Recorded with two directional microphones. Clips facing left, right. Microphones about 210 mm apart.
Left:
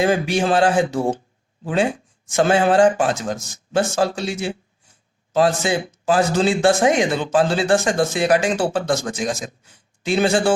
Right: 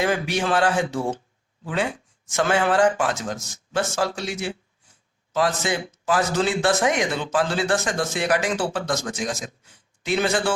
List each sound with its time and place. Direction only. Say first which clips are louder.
0.0 s speech: left 5 dB; 30° left (ahead or behind)